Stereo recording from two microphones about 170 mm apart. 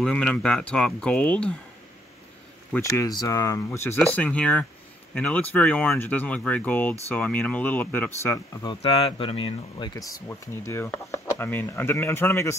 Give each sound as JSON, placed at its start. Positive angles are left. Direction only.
{"t": 0.0, "sound": "speech", "side_deg": 5}
{"t": 2.7, "sound": "speech", "side_deg": 15}
{"t": 8.6, "sound": "speech", "side_deg": 30}